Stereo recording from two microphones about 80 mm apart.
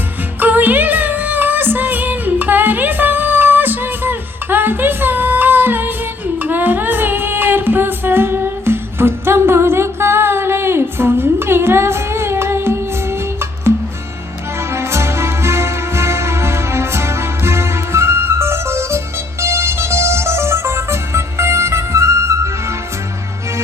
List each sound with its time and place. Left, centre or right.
0.3 s music: right